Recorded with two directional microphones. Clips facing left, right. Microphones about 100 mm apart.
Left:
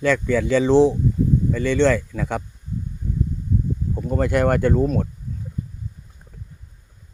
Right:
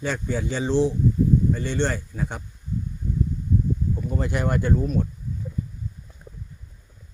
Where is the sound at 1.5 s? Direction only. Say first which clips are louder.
Left 7 dB; 90° left.